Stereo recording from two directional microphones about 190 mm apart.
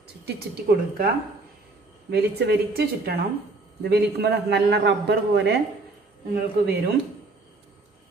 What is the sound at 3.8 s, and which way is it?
A man's voice, 60° right (ahead or behind).